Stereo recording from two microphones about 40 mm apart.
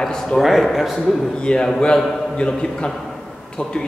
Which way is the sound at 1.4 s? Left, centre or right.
Centre.